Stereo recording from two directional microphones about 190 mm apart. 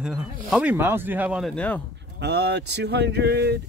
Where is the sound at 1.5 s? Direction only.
5° left (ahead or behind).